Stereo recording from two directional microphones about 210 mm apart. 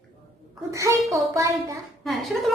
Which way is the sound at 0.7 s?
15° right (ahead or behind).